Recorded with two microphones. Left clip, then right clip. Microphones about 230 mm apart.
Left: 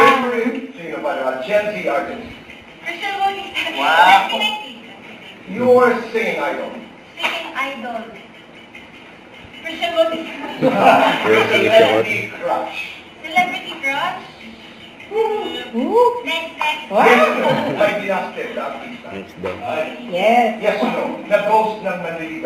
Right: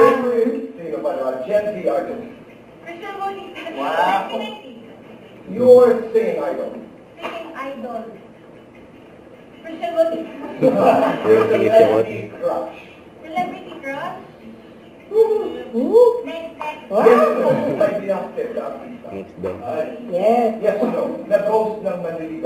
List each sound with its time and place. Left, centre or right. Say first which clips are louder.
0.0 s a sound: left 1 dB; centre
2.8 s a man's voice: left 7 dB; centre
5.5 s a man's voice: right 2 dB; left
7.3 s a sound: left 7 dB; centre
10.2 s a man's voice: even; centre
15.1 s a man's voice: right 3 dB; centre
19.7 s a man's voice: even; centre